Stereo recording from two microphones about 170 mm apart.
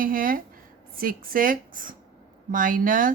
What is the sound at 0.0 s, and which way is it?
Speech, 55° right (ahead or behind).